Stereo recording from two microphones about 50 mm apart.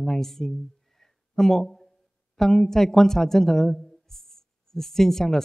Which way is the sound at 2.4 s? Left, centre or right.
Centre.